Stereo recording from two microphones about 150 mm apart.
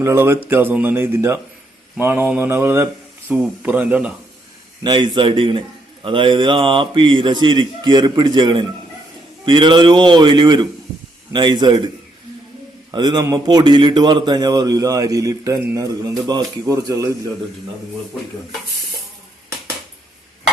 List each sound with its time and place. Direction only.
0.0 s speech: 15° right (ahead or behind)
4.8 s a man's voice: 30° right (ahead or behind)
12.9 s a man's voice: 30° right (ahead or behind)